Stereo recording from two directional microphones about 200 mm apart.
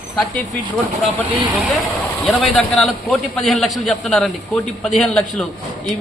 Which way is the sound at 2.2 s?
5° left (ahead or behind).